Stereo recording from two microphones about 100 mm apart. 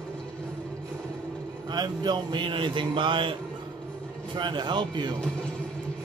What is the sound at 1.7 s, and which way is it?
A man's voice, 45° right (ahead or behind).